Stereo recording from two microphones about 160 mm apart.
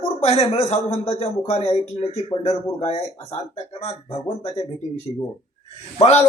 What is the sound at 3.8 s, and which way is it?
Speech, 40° left (ahead or behind).